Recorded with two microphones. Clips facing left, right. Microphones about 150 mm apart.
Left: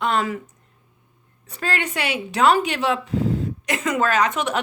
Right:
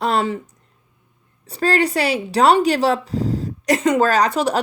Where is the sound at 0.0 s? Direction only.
35° right (ahead or behind).